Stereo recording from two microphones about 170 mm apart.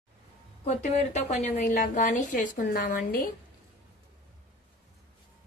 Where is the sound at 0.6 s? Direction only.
45° left (ahead or behind).